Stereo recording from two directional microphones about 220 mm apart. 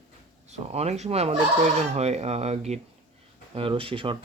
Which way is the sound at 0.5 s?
30° right (ahead or behind).